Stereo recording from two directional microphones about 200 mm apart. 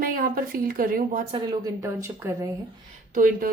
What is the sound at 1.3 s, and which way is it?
Speech, 25° right (ahead or behind).